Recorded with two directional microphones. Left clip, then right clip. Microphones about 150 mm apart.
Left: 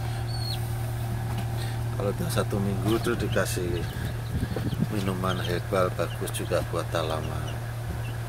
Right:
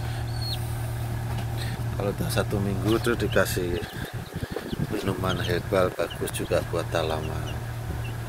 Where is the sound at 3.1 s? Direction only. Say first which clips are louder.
Right 3 dB; 20° right (ahead or behind).